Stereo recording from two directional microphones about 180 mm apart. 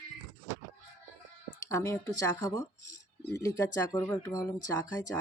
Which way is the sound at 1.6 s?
15° left (ahead or behind).